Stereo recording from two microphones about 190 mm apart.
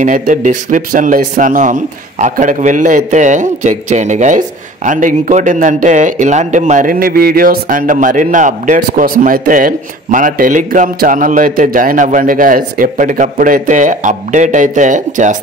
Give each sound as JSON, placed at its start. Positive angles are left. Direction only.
{"t": 0.0, "sound": "a man's voice", "side_deg": -45}